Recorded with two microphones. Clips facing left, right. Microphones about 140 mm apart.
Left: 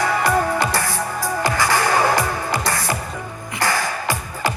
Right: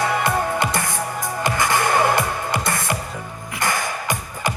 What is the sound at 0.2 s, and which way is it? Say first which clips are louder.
Music: left 2 dB; 20° right (ahead or behind).